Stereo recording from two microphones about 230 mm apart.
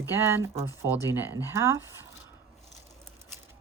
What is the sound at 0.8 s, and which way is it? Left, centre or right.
Speech, centre.